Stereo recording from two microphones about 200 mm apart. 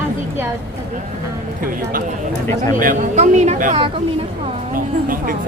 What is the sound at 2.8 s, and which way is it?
A woman's voice, 40° right (ahead or behind).